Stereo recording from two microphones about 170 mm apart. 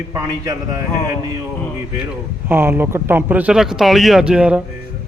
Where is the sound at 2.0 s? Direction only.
10° right (ahead or behind).